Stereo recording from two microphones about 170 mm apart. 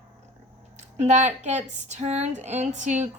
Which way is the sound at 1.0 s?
40° right (ahead or behind).